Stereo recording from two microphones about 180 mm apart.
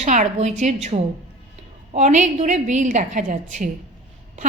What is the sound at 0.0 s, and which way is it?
A woman's voice, 40° right (ahead or behind).